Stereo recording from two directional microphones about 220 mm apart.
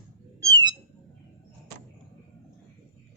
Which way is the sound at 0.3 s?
15° right (ahead or behind).